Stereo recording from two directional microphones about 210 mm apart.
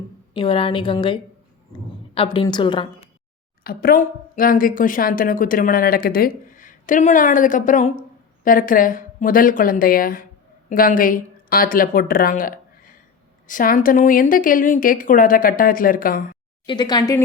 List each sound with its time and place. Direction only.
0.3 s a woman's voice: 25° left (ahead or behind)
3.6 s a woman's voice: 45° left (ahead or behind)
16.6 s a woman's voice: 20° left (ahead or behind)